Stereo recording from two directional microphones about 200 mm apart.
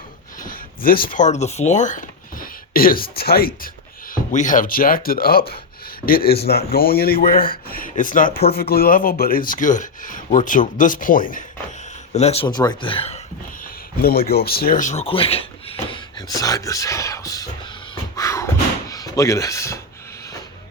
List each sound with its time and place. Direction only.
0.3 s speech: 45° left (ahead or behind)
12.1 s speech: 30° left (ahead or behind)
14.0 s speech: 50° left (ahead or behind); by 17.5 s 15° left (ahead or behind)
18.2 s a sound: 15° left (ahead or behind)
18.9 s speech: 15° left (ahead or behind)